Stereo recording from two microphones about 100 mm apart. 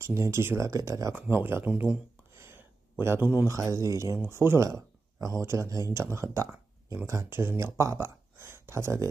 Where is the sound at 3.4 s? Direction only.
30° right (ahead or behind).